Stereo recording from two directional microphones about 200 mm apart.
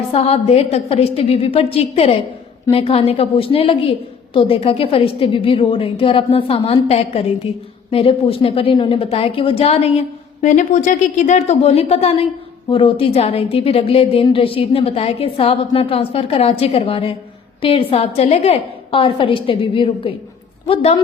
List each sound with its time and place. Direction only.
0.1 s a woman's voice: 30° left (ahead or behind)